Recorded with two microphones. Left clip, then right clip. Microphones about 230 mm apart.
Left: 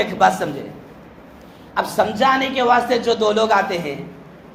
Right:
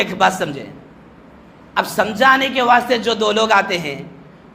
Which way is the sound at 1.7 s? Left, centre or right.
Right.